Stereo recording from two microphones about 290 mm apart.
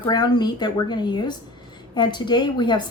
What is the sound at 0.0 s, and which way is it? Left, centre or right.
Speech, centre.